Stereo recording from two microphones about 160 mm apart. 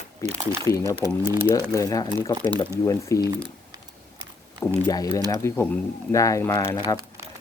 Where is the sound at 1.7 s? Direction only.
20° left (ahead or behind).